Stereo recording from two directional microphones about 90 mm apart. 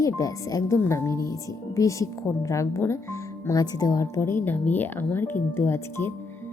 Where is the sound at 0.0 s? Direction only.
40° left (ahead or behind).